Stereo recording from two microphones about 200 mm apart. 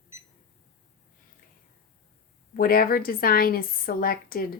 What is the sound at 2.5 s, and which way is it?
A woman's voice, 45° left (ahead or behind).